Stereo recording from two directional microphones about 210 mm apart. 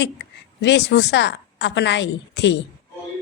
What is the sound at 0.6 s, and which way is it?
A woman's voice, 55° left (ahead or behind).